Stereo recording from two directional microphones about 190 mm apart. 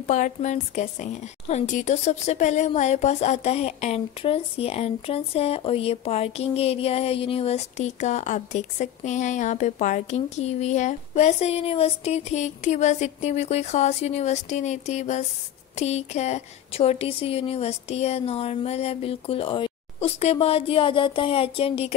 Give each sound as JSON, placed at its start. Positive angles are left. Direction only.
{"t": 0.0, "sound": "a woman's voice", "side_deg": 40}